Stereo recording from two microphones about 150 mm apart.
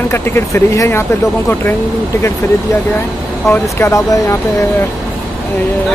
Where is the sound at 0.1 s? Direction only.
15° left (ahead or behind).